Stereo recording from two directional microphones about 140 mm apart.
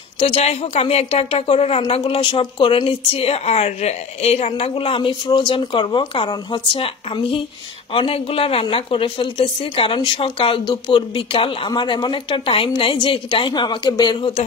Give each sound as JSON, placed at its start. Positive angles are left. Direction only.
{"t": 0.2, "sound": "a woman's voice", "side_deg": 45}